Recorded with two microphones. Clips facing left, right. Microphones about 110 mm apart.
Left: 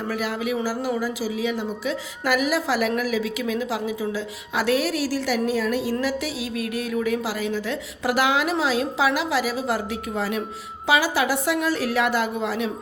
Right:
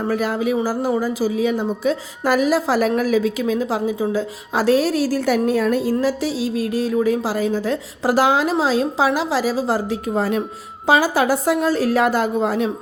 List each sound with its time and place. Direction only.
0.0 s speech: 40° right (ahead or behind)